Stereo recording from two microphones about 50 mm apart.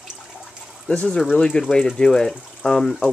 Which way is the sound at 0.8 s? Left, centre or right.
Left.